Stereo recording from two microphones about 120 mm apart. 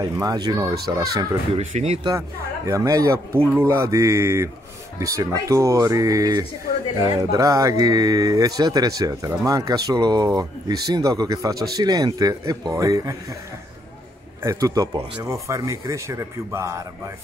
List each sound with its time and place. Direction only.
0.0 s speech: 30° right (ahead or behind)
1.5 s speech: 70° right (ahead or behind)
2.0 s speech: 25° right (ahead or behind)
14.4 s speech: 25° right (ahead or behind)